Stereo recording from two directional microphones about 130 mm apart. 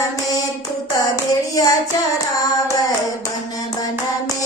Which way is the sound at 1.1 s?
30° left (ahead or behind).